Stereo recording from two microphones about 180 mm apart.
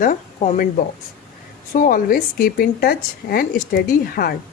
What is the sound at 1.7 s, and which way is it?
Speech, 50° left (ahead or behind).